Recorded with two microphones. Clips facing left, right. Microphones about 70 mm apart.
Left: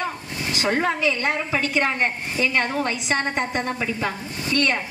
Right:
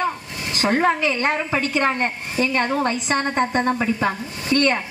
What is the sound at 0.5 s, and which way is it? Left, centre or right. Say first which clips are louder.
A woman's voice: right 4 dB; right.